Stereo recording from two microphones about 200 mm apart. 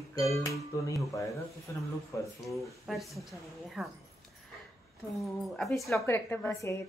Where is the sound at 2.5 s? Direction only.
Centre (ahead or behind).